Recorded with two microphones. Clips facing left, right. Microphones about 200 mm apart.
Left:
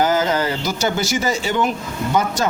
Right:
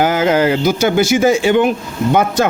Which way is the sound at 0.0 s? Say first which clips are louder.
Right 5 dB; 60° right (ahead or behind).